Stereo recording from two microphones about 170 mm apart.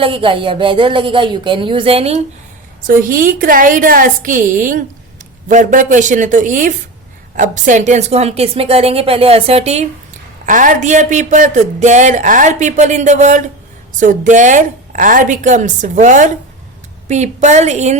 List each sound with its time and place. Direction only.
0.0 s a woman's voice: 30° right (ahead or behind)
2.8 s a woman's voice: 55° right (ahead or behind); by 9.8 s 40° right (ahead or behind)
10.4 s speech: 50° right (ahead or behind)